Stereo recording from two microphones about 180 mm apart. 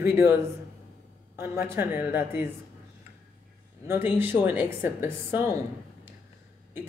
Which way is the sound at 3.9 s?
10° right (ahead or behind).